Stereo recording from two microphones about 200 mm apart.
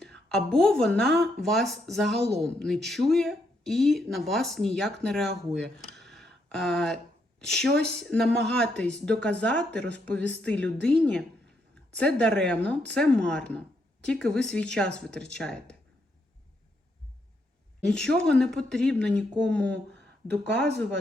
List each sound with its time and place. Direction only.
0.0 s a woman's voice: 5° left (ahead or behind)
17.8 s a woman's voice: 5° left (ahead or behind)
20.5 s speech: 55° right (ahead or behind)